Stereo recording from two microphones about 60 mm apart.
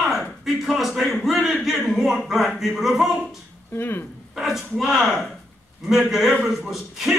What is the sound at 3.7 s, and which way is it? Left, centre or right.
Speech, left.